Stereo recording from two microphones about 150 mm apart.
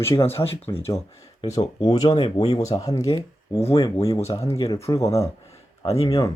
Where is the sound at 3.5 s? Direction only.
40° left (ahead or behind).